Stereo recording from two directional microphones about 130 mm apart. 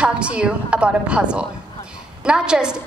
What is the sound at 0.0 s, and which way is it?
A woman's voice, 10° right (ahead or behind).